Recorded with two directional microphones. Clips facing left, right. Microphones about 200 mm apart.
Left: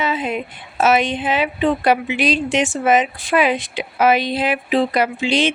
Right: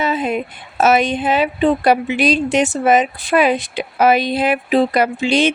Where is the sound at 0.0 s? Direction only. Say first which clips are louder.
Right 3 dB; 40° right (ahead or behind).